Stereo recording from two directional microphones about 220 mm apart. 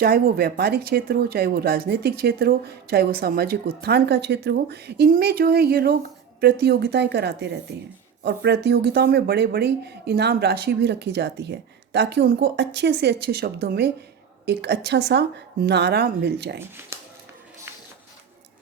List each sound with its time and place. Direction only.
0.0 s speech: 45° right (ahead or behind)
16.6 s speech: 10° right (ahead or behind)